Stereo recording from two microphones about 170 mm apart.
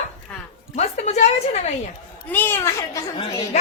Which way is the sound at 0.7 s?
40° left (ahead or behind).